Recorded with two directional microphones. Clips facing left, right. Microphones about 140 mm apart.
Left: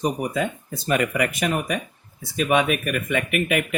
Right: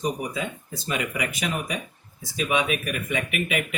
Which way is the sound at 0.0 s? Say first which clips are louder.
Left 4 dB; 55° left (ahead or behind).